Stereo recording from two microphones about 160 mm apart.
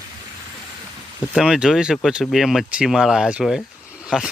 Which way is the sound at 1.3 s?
5° right (ahead or behind).